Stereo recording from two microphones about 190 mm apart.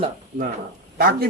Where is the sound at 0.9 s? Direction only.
50° right (ahead or behind).